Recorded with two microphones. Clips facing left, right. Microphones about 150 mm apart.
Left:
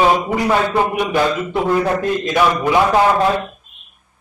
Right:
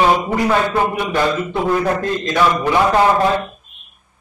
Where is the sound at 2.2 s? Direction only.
10° left (ahead or behind).